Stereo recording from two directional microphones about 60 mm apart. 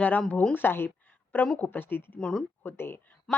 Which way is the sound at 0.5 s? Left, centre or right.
Left.